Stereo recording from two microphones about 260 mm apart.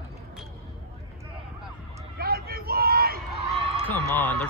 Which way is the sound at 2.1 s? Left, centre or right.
Right.